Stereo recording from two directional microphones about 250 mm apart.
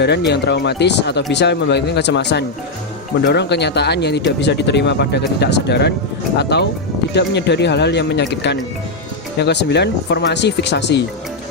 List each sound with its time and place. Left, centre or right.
0.0 s speech: left